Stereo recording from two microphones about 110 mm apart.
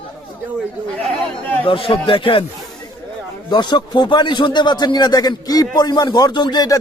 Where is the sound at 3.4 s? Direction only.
45° left (ahead or behind).